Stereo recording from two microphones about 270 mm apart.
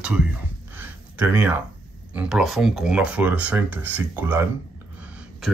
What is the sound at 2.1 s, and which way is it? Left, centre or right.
Speech, centre.